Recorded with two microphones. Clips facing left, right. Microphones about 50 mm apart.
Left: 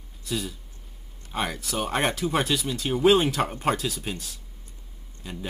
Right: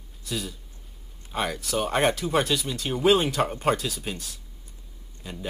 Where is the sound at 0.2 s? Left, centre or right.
Centre.